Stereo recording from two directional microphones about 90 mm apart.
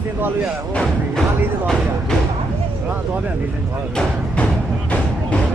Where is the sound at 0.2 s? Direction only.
20° right (ahead or behind).